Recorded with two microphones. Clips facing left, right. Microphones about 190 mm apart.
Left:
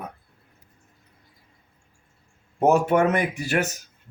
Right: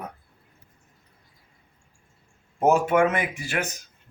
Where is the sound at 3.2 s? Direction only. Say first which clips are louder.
Left 4 dB; 40° left (ahead or behind).